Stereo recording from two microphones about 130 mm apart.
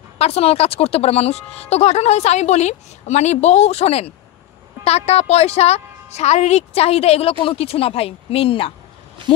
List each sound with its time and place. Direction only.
0.2 s a woman's voice: 50° left (ahead or behind)